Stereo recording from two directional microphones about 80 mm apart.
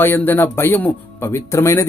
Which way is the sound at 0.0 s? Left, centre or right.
Left.